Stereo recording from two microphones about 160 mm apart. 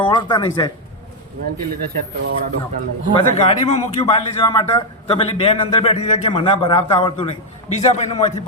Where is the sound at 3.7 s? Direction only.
30° left (ahead or behind).